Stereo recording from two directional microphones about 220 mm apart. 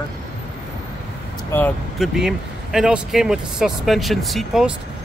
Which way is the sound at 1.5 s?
5° left (ahead or behind).